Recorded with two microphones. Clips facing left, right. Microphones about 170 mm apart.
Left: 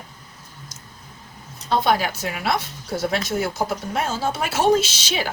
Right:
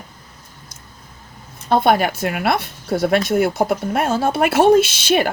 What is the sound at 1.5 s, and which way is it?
Speech, 55° right (ahead or behind).